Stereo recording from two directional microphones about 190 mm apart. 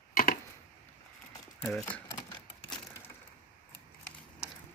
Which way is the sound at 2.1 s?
20° left (ahead or behind).